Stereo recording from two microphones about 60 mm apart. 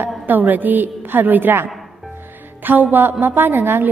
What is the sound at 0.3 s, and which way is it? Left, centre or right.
A woman's voice, right.